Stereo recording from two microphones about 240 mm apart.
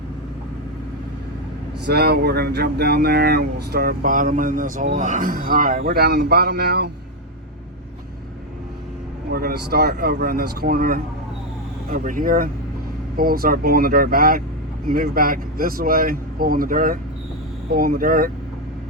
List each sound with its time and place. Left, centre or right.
1.9 s speech: right
9.3 s speech: right